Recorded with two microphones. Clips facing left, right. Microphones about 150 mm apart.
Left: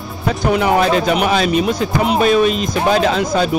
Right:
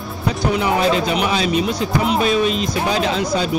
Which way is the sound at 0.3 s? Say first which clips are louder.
Left 4 dB; 55° left (ahead or behind).